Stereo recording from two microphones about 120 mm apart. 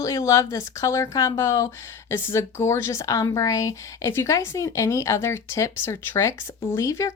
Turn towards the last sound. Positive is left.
turn(degrees=25)  # may be behind; listen again after turning